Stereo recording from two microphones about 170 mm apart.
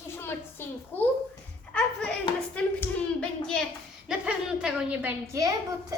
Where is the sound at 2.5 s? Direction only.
5° left (ahead or behind); by 5.9 s 20° right (ahead or behind).